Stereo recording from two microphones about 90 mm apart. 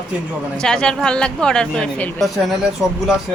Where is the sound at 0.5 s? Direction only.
10° left (ahead or behind).